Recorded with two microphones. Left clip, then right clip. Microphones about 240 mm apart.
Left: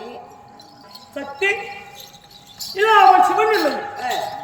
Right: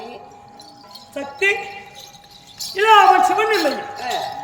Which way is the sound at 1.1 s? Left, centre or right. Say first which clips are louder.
Right 2 dB; centre.